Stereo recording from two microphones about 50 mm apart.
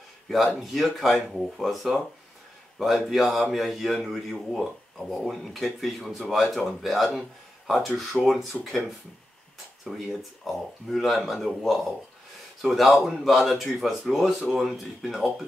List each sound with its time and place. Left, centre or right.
0.6 s a man's voice: centre